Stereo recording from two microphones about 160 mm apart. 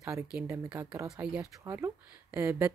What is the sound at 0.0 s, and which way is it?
Speech, 15° right (ahead or behind).